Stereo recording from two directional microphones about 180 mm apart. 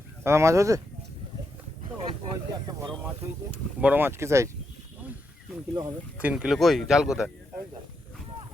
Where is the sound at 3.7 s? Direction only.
10° right (ahead or behind).